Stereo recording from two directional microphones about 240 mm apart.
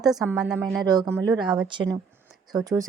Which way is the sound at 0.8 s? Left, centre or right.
Centre.